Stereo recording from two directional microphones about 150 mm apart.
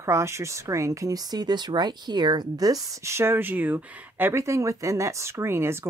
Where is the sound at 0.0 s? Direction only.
20° right (ahead or behind).